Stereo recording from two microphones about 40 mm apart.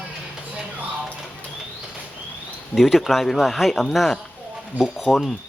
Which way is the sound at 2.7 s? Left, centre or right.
Centre.